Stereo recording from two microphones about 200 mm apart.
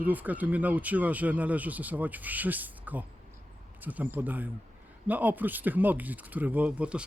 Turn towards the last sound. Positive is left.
turn(degrees=-5)  # may be behind; listen again after turning